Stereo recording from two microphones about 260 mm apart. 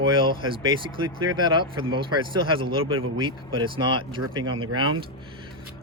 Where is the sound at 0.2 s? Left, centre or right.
Centre.